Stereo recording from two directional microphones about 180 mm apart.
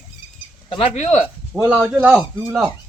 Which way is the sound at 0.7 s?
30° left (ahead or behind).